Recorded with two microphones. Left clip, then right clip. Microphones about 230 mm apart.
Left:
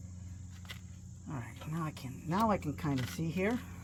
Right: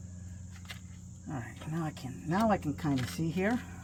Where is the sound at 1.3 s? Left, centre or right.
Centre.